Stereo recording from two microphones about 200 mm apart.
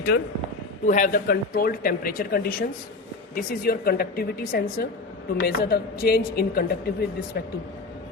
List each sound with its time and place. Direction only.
0.9 s a woman's voice: 40° left (ahead or behind)